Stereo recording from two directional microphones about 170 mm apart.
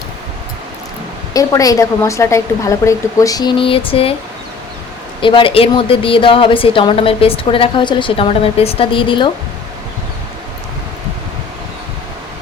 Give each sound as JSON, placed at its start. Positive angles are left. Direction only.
{"t": 1.3, "sound": "a woman's voice", "side_deg": 20}
{"t": 5.2, "sound": "a woman's voice", "side_deg": 30}